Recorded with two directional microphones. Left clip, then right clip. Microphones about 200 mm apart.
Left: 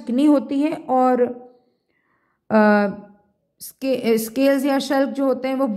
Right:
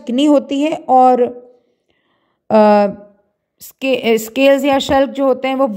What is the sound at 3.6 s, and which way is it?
A woman's voice, 25° right (ahead or behind).